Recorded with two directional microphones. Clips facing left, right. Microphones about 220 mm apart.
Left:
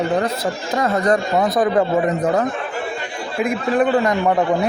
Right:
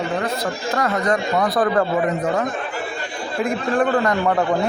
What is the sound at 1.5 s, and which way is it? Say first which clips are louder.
Speech: left 2 dB; 20° left (ahead or behind).